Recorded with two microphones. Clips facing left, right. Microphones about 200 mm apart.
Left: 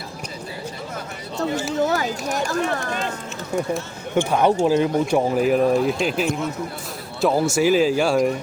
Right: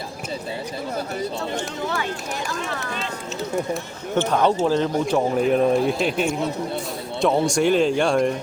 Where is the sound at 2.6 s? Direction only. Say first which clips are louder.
Left 5 dB; 50° left (ahead or behind).